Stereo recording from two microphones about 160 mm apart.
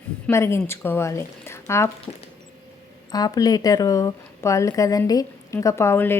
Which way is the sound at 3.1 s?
25° left (ahead or behind).